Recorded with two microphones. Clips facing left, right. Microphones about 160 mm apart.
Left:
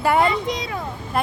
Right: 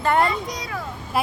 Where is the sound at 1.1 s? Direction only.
5° right (ahead or behind).